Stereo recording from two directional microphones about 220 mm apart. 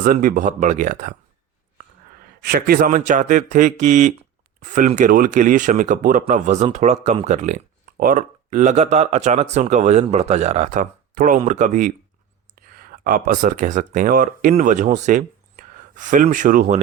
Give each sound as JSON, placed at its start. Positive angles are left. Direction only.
{"t": 0.0, "sound": "speech", "side_deg": -40}
{"t": 2.4, "sound": "speech", "side_deg": -45}